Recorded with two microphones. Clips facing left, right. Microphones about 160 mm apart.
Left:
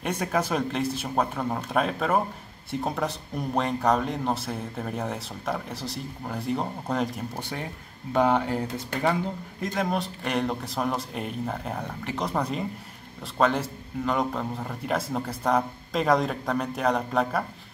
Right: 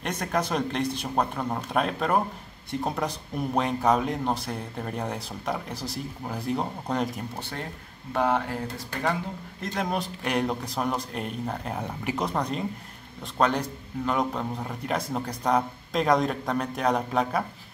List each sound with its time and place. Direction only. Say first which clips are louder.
0.0 s speech: left 1 dB; 5° left (ahead or behind)
7.3 s speech: left 2 dB; 15° left (ahead or behind)
9.6 s speech: left 1 dB; centre (ahead or behind)
12.0 s speech: right 3 dB; 10° right (ahead or behind)
12.3 s speech: even; centre (ahead or behind)